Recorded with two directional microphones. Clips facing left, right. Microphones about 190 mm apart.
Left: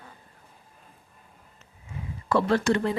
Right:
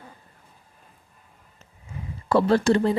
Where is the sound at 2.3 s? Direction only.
35° right (ahead or behind).